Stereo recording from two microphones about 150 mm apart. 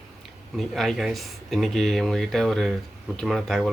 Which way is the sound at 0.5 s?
Centre (ahead or behind).